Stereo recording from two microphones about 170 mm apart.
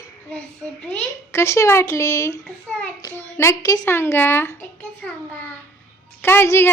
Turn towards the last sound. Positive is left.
turn(degrees=15)  # may be behind; listen again after turning